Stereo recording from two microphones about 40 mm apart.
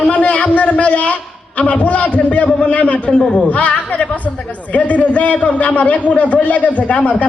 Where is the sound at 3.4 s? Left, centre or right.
Left.